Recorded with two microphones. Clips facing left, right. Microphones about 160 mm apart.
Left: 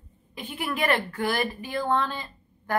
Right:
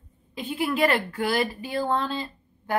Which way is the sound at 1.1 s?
30° right (ahead or behind).